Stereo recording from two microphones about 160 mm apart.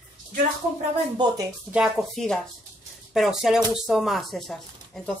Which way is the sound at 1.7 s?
Centre (ahead or behind).